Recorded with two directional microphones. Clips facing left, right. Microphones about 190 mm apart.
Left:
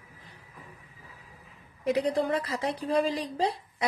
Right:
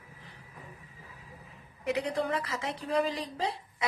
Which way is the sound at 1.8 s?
35° left (ahead or behind).